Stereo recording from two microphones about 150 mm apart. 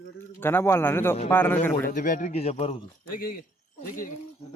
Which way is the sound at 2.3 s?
45° left (ahead or behind).